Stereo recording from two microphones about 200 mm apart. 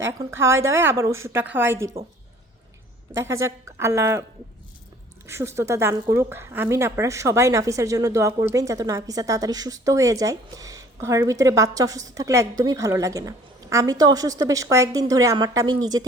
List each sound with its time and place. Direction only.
0.0 s speech: 15° right (ahead or behind)
3.2 s speech: 15° right (ahead or behind)
5.2 s speech: 15° right (ahead or behind)